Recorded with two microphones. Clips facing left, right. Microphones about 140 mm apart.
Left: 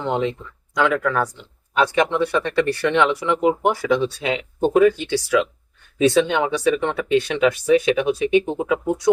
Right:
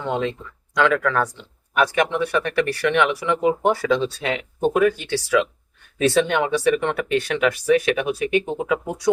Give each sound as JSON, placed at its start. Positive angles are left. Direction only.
{"t": 0.0, "sound": "speech", "side_deg": 20}
{"t": 1.7, "sound": "speech", "side_deg": 25}